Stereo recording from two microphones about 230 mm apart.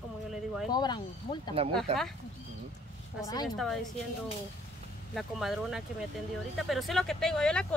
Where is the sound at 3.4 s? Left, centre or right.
Centre.